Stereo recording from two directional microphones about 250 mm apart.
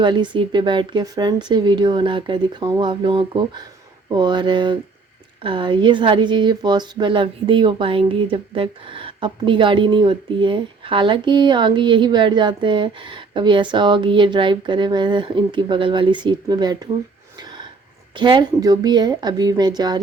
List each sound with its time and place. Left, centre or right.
0.0 s a woman's voice: centre
17.3 s a sound: centre
18.1 s a woman's voice: centre